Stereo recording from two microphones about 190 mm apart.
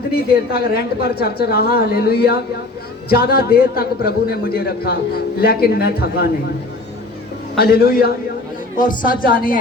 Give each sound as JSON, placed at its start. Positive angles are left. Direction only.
{"t": 0.1, "sound": "a man's voice", "side_deg": 55}
{"t": 7.6, "sound": "speech", "side_deg": 55}